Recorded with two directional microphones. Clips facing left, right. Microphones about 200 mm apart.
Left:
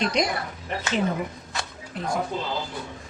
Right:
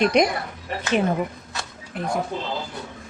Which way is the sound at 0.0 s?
60° right (ahead or behind).